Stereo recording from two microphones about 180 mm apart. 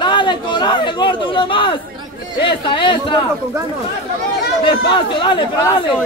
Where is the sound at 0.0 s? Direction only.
25° left (ahead or behind).